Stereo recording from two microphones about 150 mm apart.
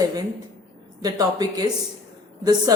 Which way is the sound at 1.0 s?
25° right (ahead or behind).